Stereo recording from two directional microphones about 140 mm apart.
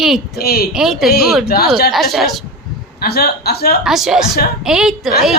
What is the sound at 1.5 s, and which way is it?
Speech, 90° left.